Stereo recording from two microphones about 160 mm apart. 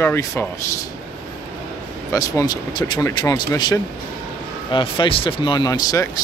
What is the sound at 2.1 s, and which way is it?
Speech, 20° left (ahead or behind).